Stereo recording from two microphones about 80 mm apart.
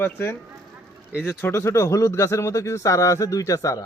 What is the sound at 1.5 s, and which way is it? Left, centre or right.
Speech, left.